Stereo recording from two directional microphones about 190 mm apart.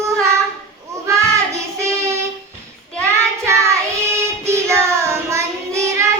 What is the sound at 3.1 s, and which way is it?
Child singing, 15° right (ahead or behind).